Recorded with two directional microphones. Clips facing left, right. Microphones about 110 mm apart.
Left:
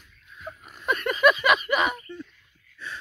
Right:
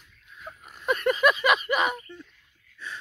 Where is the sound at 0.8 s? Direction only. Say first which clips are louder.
Left 1 dB; 30° right (ahead or behind).